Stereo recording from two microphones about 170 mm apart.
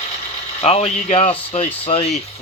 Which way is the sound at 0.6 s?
35° left (ahead or behind).